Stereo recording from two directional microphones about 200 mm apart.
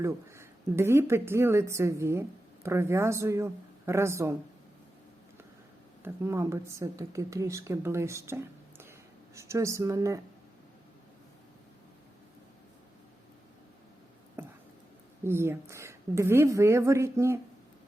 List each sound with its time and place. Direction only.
0.0 s a woman's voice: 15° right (ahead or behind)
6.0 s a woman's voice: 10° right (ahead or behind)
14.4 s a sound: 10° right (ahead or behind)
15.2 s a woman's voice: 10° right (ahead or behind)